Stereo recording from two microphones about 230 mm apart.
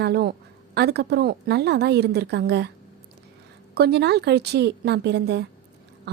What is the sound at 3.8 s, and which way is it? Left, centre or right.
A woman's voice, right.